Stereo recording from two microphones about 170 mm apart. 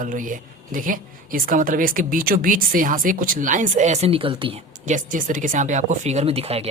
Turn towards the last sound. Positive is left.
turn(degrees=-35)  # may be behind; listen again after turning